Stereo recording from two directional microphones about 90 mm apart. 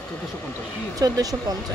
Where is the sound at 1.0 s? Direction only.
45° right (ahead or behind).